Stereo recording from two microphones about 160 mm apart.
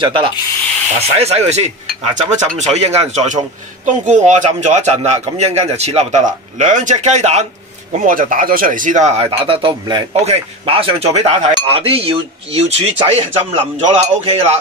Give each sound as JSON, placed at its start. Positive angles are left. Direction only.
{"t": 0.0, "sound": "a man's voice", "side_deg": -35}
{"t": 7.9, "sound": "a man's voice", "side_deg": -55}